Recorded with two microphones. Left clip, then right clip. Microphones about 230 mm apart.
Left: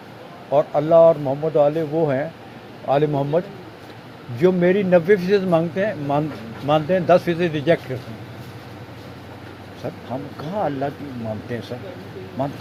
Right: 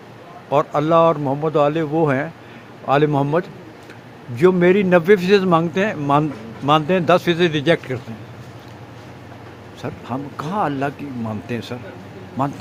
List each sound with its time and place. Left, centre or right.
0.5 s a man's voice: right
9.8 s a man's voice: right